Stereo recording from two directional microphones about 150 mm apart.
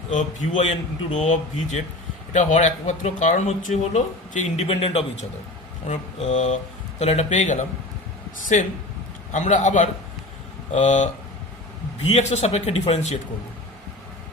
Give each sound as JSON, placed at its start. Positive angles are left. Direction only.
{"t": 0.1, "sound": "a man's voice", "side_deg": 50}